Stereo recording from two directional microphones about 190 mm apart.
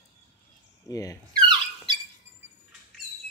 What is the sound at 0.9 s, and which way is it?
Speech, 20° left (ahead or behind).